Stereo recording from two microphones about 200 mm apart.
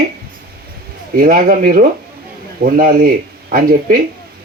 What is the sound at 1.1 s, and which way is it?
Speech, 45° right (ahead or behind).